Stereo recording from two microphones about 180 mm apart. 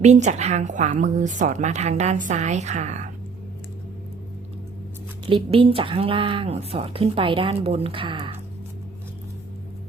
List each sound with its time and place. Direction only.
0.0 s speech: 40° right (ahead or behind)
5.2 s speech: 30° right (ahead or behind)